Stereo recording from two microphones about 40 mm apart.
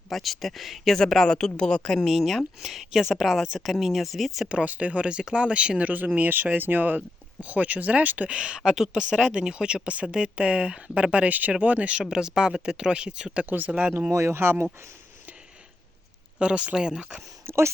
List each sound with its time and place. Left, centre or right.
0.1 s speech: centre
0.9 s a woman's voice: centre
2.0 s speech: centre
4.6 s speech: right
6.1 s speech: right
8.3 s speech: right
11.3 s speech: right
12.0 s speech: centre
13.4 s speech: right
16.4 s speech: right
16.7 s speech: centre
17.5 s speech: right